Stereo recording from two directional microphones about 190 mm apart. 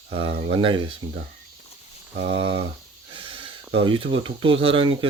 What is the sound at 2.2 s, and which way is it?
Speech, 30° right (ahead or behind).